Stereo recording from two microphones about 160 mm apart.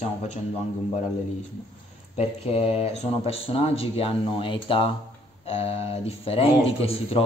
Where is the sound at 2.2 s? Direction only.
40° left (ahead or behind).